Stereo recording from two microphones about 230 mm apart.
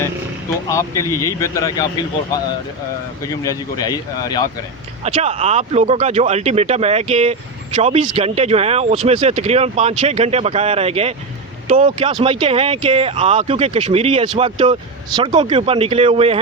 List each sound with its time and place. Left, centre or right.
0.7 s speech: centre
3.4 s speech: centre
5.0 s speech: right